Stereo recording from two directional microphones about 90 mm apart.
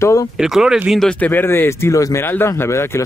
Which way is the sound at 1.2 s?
25° left (ahead or behind).